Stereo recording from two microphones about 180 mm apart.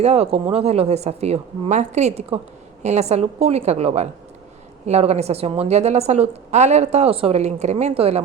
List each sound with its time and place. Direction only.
0.0 s a woman's voice: 35° right (ahead or behind)